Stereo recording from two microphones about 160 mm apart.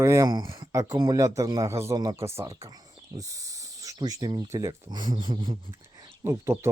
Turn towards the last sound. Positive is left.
turn(degrees=-15)  # may be behind; listen again after turning